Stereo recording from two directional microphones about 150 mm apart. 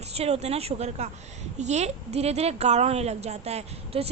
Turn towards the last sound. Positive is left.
turn(degrees=-45)  # may be behind; listen again after turning